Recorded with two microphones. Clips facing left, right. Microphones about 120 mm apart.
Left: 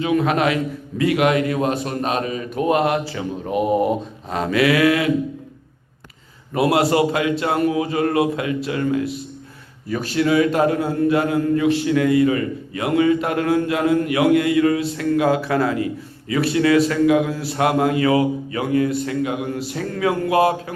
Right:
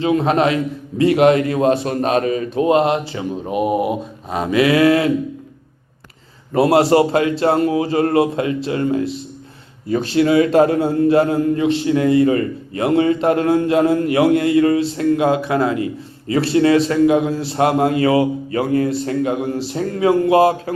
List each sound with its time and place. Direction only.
0.0 s a man's voice: 30° right (ahead or behind)
2.6 s a man's voice: 25° right (ahead or behind)
6.5 s a man's voice: 30° right (ahead or behind)